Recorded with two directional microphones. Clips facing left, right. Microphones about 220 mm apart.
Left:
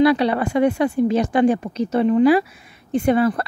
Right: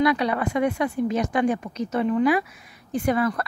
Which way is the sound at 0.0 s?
30° left (ahead or behind).